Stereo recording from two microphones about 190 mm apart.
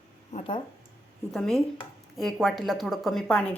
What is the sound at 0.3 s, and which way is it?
Speech, 30° left (ahead or behind).